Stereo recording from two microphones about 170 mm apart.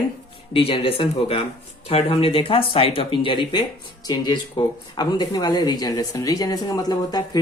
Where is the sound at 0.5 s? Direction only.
35° left (ahead or behind).